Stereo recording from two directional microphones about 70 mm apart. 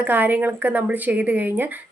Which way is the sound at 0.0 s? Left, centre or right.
Right.